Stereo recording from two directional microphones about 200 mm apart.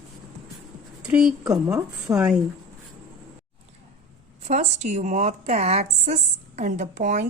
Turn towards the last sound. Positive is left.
turn(degrees=-35)  # may be behind; listen again after turning